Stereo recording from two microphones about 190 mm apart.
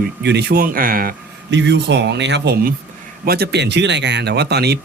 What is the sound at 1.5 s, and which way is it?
Speech, 70° right (ahead or behind).